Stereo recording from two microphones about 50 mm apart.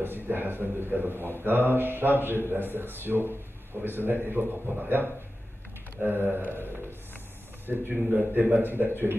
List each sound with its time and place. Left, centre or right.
0.0 s a man's voice: right